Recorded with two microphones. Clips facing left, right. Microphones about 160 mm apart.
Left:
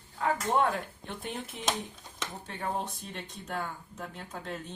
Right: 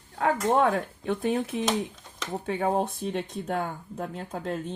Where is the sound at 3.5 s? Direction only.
45° right (ahead or behind).